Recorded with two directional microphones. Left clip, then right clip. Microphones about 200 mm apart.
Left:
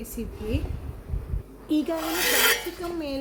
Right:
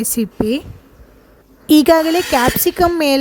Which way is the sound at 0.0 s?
50° right (ahead or behind).